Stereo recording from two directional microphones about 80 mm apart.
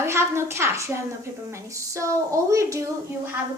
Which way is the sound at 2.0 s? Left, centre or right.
Right.